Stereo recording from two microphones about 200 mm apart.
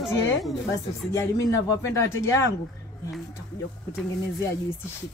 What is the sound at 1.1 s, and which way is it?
A man's voice, 15° left (ahead or behind).